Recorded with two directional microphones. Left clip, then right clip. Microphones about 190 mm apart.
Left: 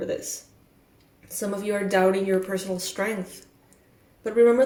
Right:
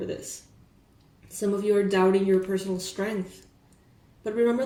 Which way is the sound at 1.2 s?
30° left (ahead or behind).